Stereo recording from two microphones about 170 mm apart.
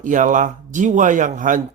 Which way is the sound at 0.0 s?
50° right (ahead or behind).